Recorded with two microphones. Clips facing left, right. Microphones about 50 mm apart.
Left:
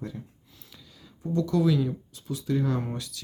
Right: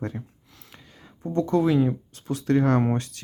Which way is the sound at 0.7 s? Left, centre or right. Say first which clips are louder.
Right 3 dB; right.